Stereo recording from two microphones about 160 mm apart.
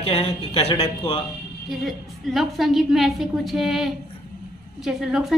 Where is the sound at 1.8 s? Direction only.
Centre (ahead or behind).